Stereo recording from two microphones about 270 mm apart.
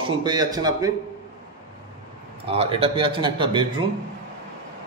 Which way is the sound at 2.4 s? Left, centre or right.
Right.